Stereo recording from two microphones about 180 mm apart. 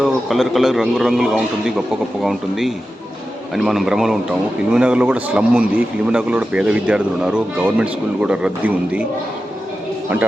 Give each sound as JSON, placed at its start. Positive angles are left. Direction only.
{"t": 0.0, "sound": "a man's voice", "side_deg": 0}